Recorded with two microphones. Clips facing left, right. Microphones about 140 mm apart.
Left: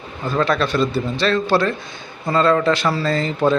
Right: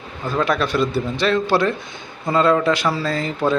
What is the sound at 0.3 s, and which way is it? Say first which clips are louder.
A man's voice: left 1 dB; 10° right (ahead or behind).